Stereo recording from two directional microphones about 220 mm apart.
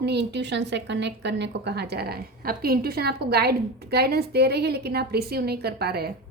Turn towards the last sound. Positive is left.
turn(degrees=-45)  # may be behind; listen again after turning